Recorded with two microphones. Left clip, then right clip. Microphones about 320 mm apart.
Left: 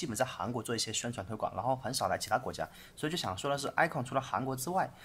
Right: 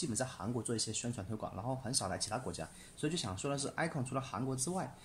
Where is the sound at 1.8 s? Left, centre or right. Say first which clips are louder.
Left 6 dB; left.